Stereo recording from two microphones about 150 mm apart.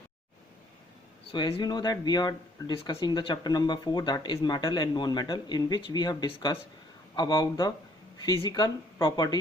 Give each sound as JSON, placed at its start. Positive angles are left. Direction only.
{"t": 1.5, "sound": "speech", "side_deg": 30}